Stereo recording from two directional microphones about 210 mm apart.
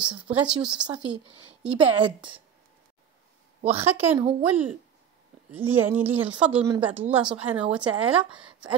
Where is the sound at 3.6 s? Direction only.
30° right (ahead or behind).